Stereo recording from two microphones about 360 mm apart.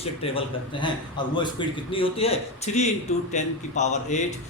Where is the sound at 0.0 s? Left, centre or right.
Centre.